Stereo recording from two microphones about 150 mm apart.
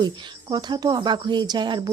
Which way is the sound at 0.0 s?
30° right (ahead or behind).